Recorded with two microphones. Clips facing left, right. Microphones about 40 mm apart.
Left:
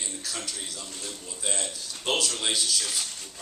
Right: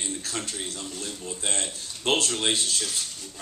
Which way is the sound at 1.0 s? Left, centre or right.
Right.